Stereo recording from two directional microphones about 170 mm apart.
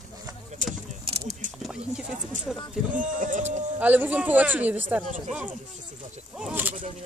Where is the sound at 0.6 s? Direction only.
45° right (ahead or behind).